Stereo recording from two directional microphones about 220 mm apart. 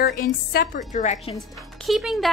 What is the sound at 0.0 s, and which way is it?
A woman's voice, 45° left (ahead or behind).